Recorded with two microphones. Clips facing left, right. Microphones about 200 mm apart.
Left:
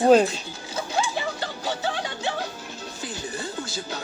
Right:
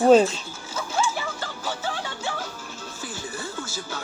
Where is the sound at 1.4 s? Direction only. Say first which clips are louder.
Left 3 dB; 20° left (ahead or behind).